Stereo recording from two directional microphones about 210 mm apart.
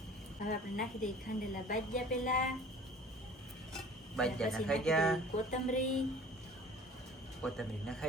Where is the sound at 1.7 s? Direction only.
40° left (ahead or behind).